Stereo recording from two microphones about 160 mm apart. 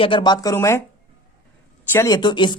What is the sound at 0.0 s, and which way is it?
Speech, 30° left (ahead or behind).